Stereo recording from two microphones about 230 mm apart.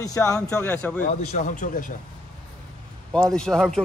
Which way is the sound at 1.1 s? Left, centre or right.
Left.